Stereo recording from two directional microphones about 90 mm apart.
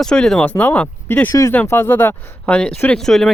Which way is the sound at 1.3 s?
35° left (ahead or behind).